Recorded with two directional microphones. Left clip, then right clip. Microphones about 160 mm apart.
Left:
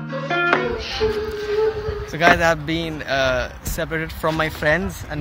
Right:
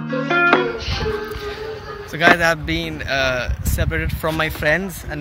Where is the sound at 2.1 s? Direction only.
5° left (ahead or behind).